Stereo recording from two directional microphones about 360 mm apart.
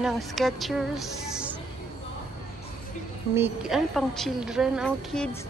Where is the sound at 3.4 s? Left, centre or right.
Centre.